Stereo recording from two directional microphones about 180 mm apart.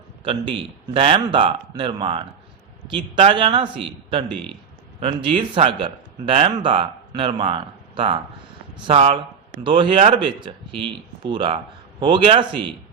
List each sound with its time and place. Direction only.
0.3 s speech: 30° right (ahead or behind)
4.9 s speech: 30° right (ahead or behind)